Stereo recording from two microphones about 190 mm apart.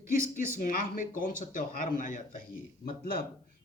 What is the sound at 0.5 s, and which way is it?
Speech, 45° left (ahead or behind).